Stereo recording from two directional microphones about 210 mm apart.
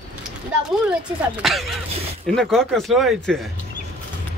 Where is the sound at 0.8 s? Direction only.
Centre (ahead or behind).